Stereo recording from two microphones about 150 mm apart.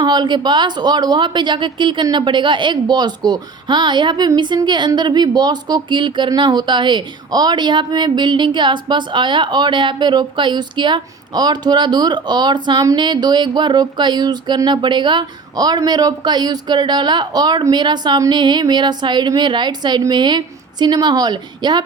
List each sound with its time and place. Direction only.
0.0 s a woman's voice: 30° right (ahead or behind)